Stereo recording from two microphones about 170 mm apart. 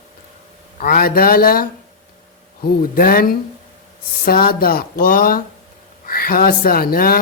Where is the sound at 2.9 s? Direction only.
60° left (ahead or behind).